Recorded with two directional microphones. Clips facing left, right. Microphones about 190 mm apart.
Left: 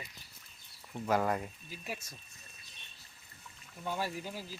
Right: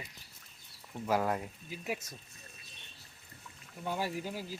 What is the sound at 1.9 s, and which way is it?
Speech, 20° right (ahead or behind).